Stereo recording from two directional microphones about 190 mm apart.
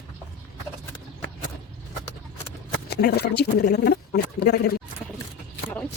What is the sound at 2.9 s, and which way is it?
Speech, 60° left (ahead or behind).